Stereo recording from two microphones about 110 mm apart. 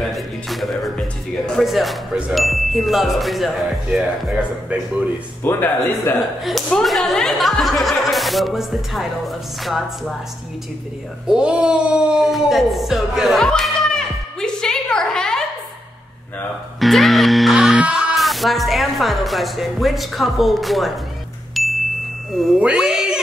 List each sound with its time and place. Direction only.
0.1 s a sound: centre (ahead or behind)
0.9 s speech: 10° left (ahead or behind); by 5.0 s 10° right (ahead or behind)
5.4 s speech: 20° left (ahead or behind)
6.1 s speech: centre (ahead or behind)
11.2 s a sound: 10° right (ahead or behind)
16.8 s music: centre (ahead or behind)
18.1 s speech: centre (ahead or behind)
21.6 s ding: centre (ahead or behind)
22.6 s speech: 10° right (ahead or behind)